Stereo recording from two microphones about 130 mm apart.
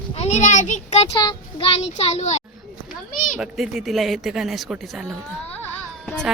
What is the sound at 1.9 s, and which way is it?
Speech, 60° left (ahead or behind).